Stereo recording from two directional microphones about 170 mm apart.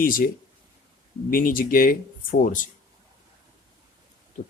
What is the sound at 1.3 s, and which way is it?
Speech, 55° left (ahead or behind).